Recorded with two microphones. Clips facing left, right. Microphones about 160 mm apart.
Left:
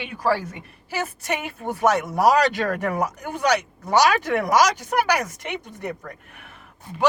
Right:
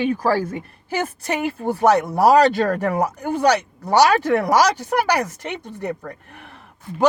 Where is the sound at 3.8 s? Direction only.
35° right (ahead or behind).